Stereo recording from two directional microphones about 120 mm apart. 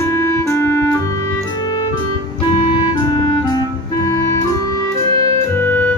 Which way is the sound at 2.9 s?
35° left (ahead or behind).